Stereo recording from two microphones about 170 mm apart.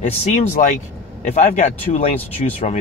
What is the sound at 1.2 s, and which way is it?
Speech, 40° left (ahead or behind).